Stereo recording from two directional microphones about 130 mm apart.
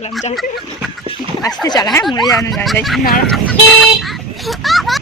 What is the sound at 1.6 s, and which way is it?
Speech, 30° left (ahead or behind).